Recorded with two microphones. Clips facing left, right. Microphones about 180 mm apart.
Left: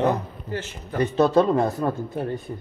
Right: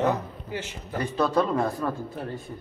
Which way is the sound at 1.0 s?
25° left (ahead or behind).